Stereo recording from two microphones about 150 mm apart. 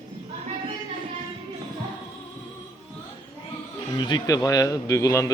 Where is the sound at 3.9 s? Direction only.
30° left (ahead or behind).